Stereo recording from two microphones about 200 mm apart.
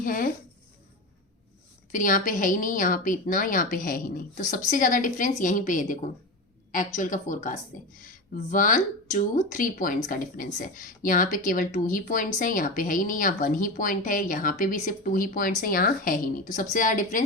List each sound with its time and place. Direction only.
0.0 s a woman's voice: 45° left (ahead or behind)
1.9 s a woman's voice: 40° left (ahead or behind)